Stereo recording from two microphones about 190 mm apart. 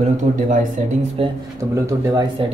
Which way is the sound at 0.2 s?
45° right (ahead or behind).